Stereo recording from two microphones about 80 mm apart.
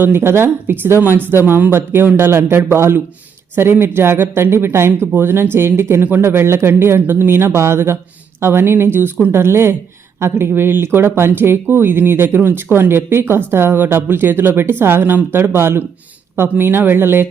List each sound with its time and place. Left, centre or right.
0.0 s speech: right